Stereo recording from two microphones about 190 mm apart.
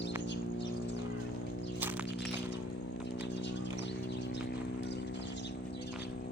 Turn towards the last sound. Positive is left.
turn(degrees=70)  # may be behind; listen again after turning